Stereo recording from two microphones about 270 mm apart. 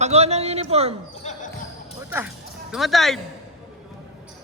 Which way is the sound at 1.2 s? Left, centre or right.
Left.